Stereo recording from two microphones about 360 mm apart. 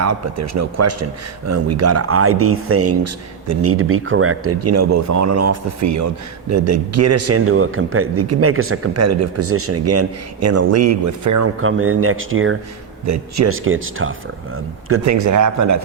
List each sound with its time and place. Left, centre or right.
0.0 s a man's voice: right
11.6 s a man's voice: right
13.1 s a man's voice: right